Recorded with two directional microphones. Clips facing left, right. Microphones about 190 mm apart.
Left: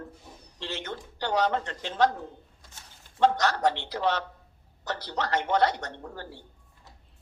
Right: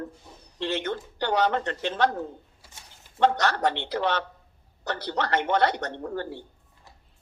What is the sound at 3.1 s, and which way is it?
Speech, 65° right (ahead or behind).